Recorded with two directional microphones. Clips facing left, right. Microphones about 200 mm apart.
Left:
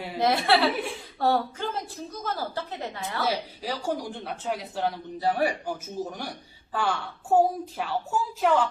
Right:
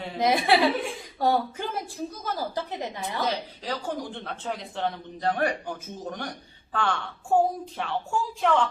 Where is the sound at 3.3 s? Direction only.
10° left (ahead or behind).